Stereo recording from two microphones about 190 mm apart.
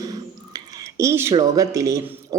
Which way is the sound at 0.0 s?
20° right (ahead or behind).